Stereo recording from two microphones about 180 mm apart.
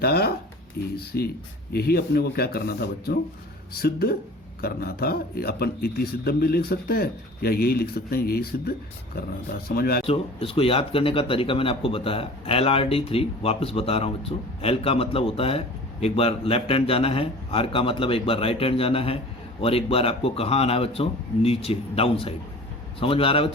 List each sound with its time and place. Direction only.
0.0 s a man's voice: 60° left (ahead or behind)
10.1 s speech: 30° left (ahead or behind)